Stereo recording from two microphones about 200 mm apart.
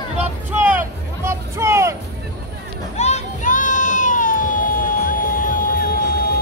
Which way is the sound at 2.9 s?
35° left (ahead or behind).